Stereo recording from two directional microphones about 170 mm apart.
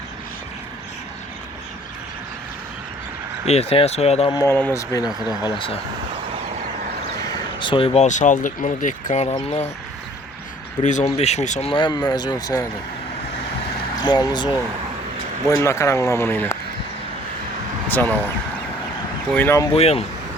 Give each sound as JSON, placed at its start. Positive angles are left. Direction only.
{"t": 3.4, "sound": "speech", "side_deg": 40}
{"t": 4.4, "sound": "speech", "side_deg": 15}
{"t": 7.6, "sound": "speech", "side_deg": 30}
{"t": 8.0, "sound": "speech", "side_deg": 45}
{"t": 10.8, "sound": "speech", "side_deg": 45}
{"t": 11.7, "sound": "speech", "side_deg": 25}
{"t": 14.0, "sound": "speech", "side_deg": 25}
{"t": 17.8, "sound": "speech", "side_deg": 10}
{"t": 19.3, "sound": "speech", "side_deg": 10}
{"t": 19.7, "sound": "speech", "side_deg": 35}